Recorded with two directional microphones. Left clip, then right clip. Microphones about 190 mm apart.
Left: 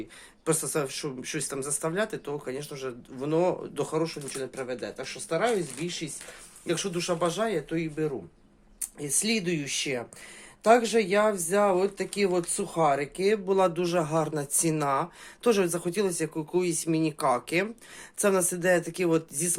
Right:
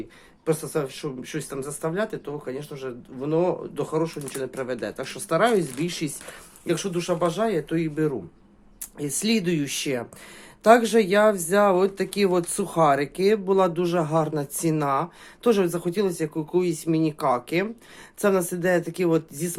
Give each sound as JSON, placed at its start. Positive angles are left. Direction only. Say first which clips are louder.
{"t": 0.4, "sound": "speech", "louder": "right 3 dB", "side_deg": 20}
{"t": 4.4, "sound": "speech", "louder": "right 5 dB", "side_deg": -10}
{"t": 6.7, "sound": "speech", "louder": "right 3 dB", "side_deg": 0}
{"t": 7.7, "sound": "speech", "louder": "right 5 dB", "side_deg": -15}